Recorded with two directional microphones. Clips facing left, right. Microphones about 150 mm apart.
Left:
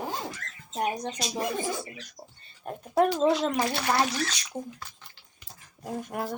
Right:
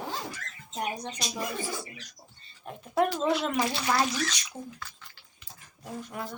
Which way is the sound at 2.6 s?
45° left (ahead or behind).